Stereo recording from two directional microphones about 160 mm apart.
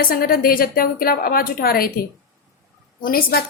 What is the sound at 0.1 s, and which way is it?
Speech, 65° left (ahead or behind).